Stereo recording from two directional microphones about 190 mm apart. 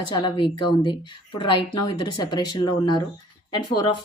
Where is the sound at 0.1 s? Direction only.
25° left (ahead or behind).